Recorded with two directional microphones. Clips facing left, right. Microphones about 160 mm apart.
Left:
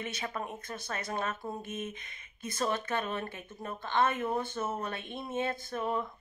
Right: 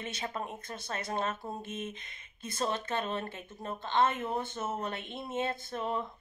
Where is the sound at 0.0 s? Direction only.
25° right (ahead or behind).